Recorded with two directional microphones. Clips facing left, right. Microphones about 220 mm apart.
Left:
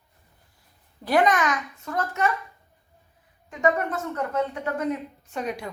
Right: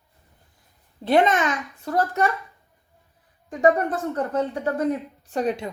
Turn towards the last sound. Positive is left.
turn(degrees=-30)  # may be behind; listen again after turning